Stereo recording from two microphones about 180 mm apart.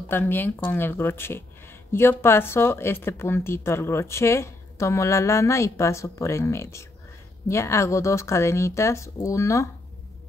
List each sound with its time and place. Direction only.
0.1 s speech: 10° left (ahead or behind)